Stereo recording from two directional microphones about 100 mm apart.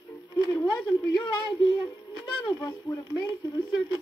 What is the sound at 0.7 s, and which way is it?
Speech, 40° left (ahead or behind).